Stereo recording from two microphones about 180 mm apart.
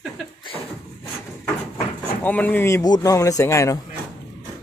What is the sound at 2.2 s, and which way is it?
Speech, 10° left (ahead or behind).